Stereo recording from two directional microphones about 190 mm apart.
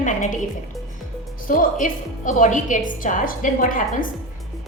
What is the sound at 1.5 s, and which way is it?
A woman's voice, 45° left (ahead or behind).